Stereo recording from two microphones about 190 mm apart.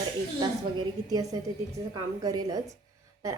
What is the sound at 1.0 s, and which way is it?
Speech, 20° right (ahead or behind).